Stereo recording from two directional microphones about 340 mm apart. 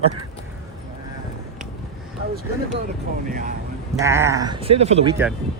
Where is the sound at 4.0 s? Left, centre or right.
Centre.